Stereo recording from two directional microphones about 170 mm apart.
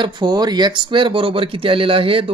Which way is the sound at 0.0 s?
25° right (ahead or behind).